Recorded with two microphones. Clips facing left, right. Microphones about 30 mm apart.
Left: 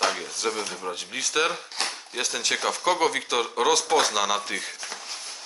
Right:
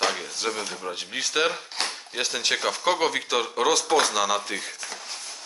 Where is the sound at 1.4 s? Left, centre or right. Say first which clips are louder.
Right 1 dB; centre.